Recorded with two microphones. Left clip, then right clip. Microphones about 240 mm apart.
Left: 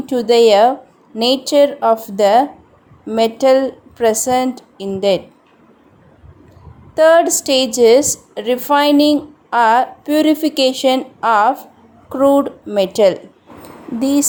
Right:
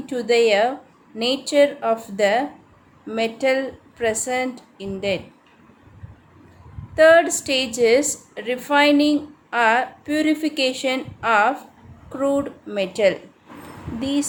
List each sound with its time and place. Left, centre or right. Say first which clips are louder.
0.0 s a woman's voice: left 7 dB; left
6.9 s a woman's voice: left 3 dB; left